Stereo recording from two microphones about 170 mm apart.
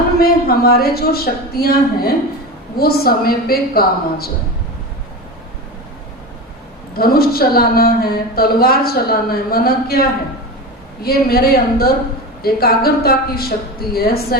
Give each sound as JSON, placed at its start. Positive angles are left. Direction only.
{"t": 0.2, "sound": "a woman's voice", "side_deg": 65}
{"t": 6.9, "sound": "a woman's voice", "side_deg": 60}